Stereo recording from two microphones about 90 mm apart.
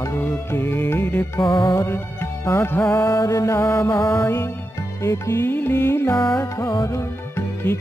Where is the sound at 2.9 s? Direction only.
40° left (ahead or behind).